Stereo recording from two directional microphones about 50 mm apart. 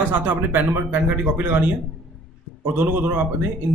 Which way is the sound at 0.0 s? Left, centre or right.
Right.